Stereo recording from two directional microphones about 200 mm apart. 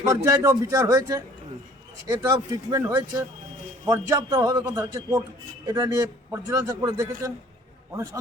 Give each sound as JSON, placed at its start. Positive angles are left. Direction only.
{"t": 0.0, "sound": "a man's voice", "side_deg": -15}